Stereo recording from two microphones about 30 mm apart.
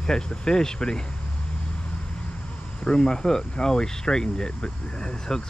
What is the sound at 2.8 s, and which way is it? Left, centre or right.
Speech, left.